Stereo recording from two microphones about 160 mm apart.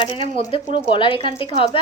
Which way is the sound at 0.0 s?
35° left (ahead or behind).